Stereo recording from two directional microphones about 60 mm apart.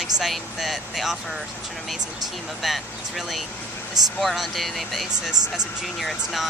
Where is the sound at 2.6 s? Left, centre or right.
Centre.